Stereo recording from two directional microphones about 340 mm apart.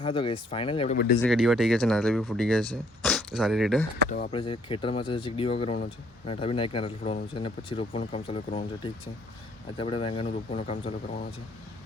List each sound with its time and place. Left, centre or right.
0.0 s speech: centre
1.2 s speech: centre
4.1 s speech: left
4.4 s speech: centre